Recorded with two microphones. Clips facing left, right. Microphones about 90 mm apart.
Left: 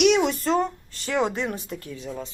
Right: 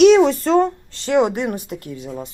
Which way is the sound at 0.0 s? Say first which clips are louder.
Right 9 dB; 35° right (ahead or behind).